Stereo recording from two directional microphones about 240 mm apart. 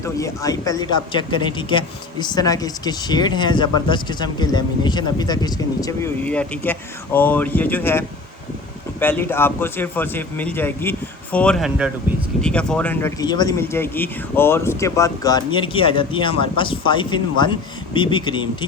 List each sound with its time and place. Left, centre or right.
0.0 s speech: centre